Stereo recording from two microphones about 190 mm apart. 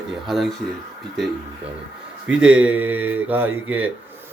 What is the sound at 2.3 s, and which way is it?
A man's voice, 5° right (ahead or behind).